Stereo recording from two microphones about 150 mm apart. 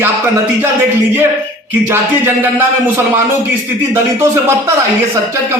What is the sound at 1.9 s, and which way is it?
Speech, 15° right (ahead or behind).